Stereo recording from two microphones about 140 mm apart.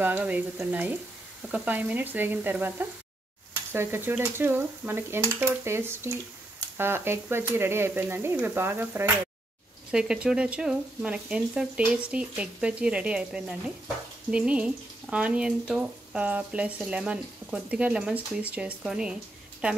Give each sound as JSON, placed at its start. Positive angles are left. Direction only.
{"t": 0.0, "sound": "speech", "side_deg": -10}